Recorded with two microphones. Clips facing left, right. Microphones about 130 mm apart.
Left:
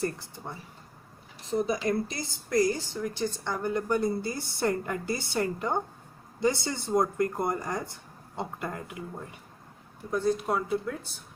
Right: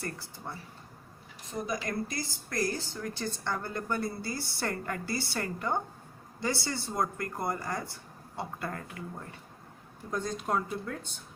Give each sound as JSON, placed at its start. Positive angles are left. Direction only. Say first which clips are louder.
{"t": 0.0, "sound": "speech", "louder": "left 6 dB", "side_deg": 20}
{"t": 10.1, "sound": "speech", "louder": "left 5 dB", "side_deg": 10}